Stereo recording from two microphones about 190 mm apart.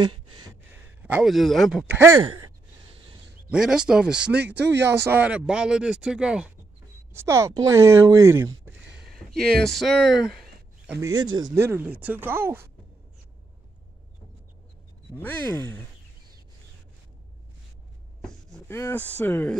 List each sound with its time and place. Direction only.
0.0 s a sound: 25° right (ahead or behind)
1.0 s speech: 5° right (ahead or behind)
2.1 s sigh: 90° right
3.4 s speech: 5° right (ahead or behind)
8.9 s a sound: centre (ahead or behind)
9.6 s speech: centre (ahead or behind)
10.9 s speech: 15° right (ahead or behind)
15.1 s speech: 10° left (ahead or behind)
18.2 s a sound: 5° left (ahead or behind)
18.7 s speech: 15° left (ahead or behind)